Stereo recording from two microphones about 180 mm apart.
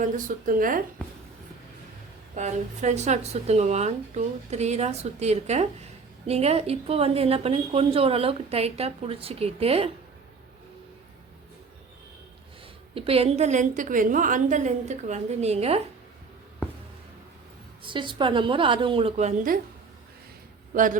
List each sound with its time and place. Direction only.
0.0 s speech: 50° right (ahead or behind)
2.3 s a woman's voice: 40° right (ahead or behind)
12.9 s a woman's voice: 30° right (ahead or behind)
17.8 s a woman's voice: 25° right (ahead or behind)
20.7 s speech: 50° right (ahead or behind)